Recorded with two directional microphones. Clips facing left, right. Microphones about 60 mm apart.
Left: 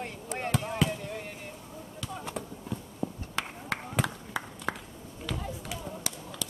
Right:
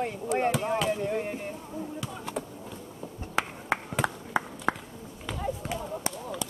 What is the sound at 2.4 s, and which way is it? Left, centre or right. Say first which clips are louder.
Horse: right 6 dB; centre.